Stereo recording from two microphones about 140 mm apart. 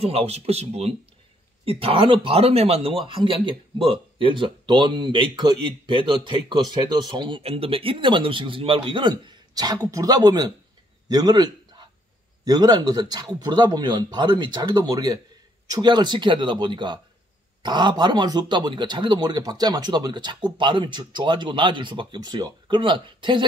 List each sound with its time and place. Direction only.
0.0 s speech: 45° right (ahead or behind); by 10.5 s 25° right (ahead or behind)
11.1 s a sound: 30° right (ahead or behind)
12.4 s speech: 30° right (ahead or behind)